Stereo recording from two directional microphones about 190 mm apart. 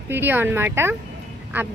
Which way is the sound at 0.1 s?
10° right (ahead or behind).